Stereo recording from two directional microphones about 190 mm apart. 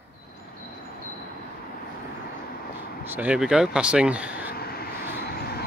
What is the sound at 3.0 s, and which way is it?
Speech, 10° right (ahead or behind).